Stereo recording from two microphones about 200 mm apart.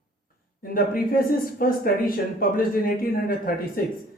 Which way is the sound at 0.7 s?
45° left (ahead or behind).